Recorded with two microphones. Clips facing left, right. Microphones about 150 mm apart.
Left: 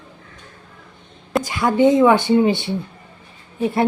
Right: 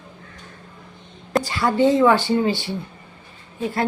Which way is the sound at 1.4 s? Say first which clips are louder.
Left 3 dB; 20° left (ahead or behind).